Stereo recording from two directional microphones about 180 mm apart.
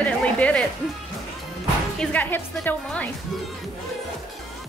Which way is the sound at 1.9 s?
5° left (ahead or behind).